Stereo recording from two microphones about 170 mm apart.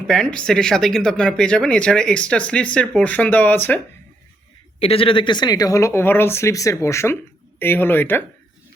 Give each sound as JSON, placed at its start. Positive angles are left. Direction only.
{"t": 0.1, "sound": "speech", "side_deg": 5}
{"t": 4.8, "sound": "speech", "side_deg": 35}